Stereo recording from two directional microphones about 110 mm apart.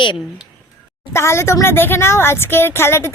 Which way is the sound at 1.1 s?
25° left (ahead or behind).